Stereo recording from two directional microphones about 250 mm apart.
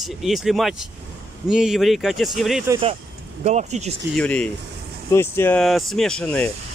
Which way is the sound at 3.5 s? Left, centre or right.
Right.